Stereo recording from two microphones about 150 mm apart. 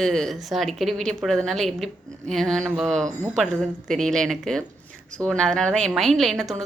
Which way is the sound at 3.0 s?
20° right (ahead or behind).